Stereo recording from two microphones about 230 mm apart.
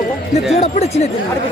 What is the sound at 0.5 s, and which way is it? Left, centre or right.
Speech, left.